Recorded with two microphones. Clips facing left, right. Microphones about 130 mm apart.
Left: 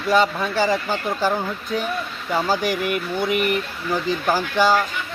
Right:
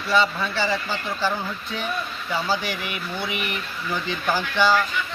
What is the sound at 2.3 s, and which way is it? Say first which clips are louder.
Speech: left 5 dB; 45° left (ahead or behind).